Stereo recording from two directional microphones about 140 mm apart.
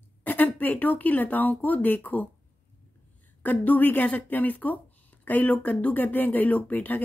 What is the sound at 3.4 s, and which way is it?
A woman's voice, 10° left (ahead or behind).